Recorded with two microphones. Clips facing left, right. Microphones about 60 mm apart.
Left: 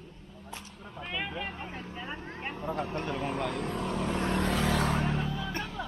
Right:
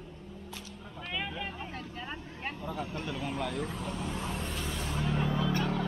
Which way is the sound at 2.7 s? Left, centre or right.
Left.